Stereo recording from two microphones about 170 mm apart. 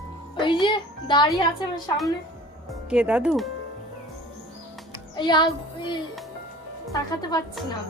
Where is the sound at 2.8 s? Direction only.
5° right (ahead or behind).